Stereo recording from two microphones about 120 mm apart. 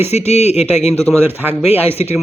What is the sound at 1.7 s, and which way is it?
Speech, 60° left (ahead or behind).